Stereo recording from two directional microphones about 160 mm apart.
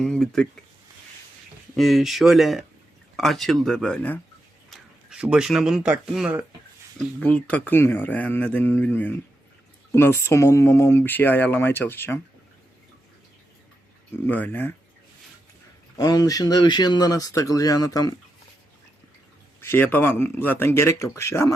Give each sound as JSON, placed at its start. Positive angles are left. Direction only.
{"t": 0.0, "sound": "speech", "side_deg": 5}
{"t": 1.7, "sound": "speech", "side_deg": 0}
{"t": 4.7, "sound": "speech", "side_deg": -5}
{"t": 7.0, "sound": "speech", "side_deg": 10}
{"t": 14.3, "sound": "speech", "side_deg": 10}
{"t": 16.0, "sound": "speech", "side_deg": 25}
{"t": 19.6, "sound": "speech", "side_deg": 15}